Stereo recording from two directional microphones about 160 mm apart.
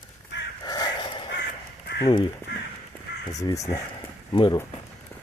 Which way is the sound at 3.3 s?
20° left (ahead or behind).